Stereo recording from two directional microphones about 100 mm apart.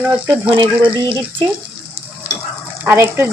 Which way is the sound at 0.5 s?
60° right (ahead or behind).